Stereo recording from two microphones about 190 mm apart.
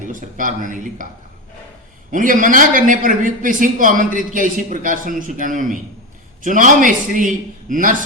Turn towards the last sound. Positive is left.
turn(degrees=-45)  # may be behind; listen again after turning